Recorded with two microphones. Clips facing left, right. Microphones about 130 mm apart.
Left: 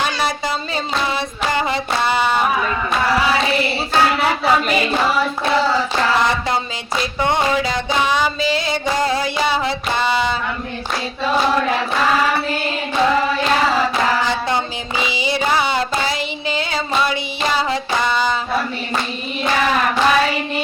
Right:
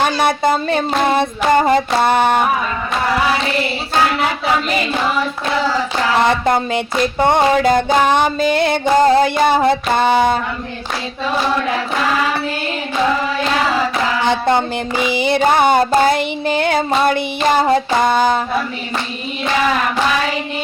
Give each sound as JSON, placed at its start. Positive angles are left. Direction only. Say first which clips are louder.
{"t": 0.0, "sound": "female singing", "louder": "right 6 dB", "side_deg": -55}
{"t": 7.0, "sound": "female singing", "louder": "right 5 dB", "side_deg": -50}
{"t": 14.3, "sound": "female singing", "louder": "right 5 dB", "side_deg": -55}